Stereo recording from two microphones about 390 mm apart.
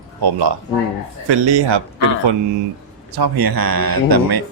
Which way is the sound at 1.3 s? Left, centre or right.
Right.